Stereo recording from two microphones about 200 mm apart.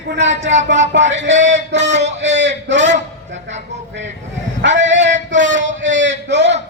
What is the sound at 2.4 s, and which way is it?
A man's voice, 60° right (ahead or behind).